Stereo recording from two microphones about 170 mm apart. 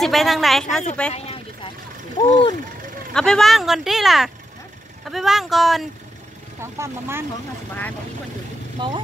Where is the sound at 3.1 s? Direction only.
5° left (ahead or behind).